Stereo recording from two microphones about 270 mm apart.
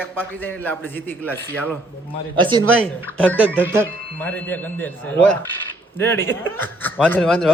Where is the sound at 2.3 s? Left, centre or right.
Centre.